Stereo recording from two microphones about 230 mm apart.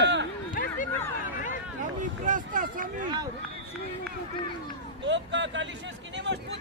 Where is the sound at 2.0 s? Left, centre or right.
Right.